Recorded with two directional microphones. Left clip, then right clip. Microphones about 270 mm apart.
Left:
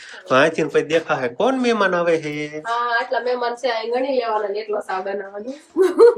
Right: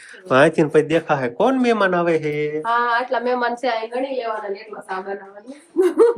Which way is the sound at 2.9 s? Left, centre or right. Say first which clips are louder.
Right 1 dB; right.